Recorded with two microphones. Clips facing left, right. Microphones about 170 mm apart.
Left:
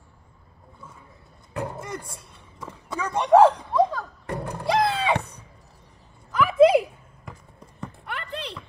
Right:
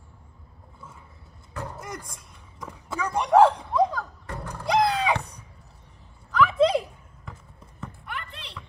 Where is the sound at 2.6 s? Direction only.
Centre (ahead or behind).